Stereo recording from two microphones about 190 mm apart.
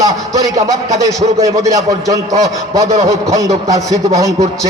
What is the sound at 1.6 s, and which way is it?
Speech, 20° right (ahead or behind).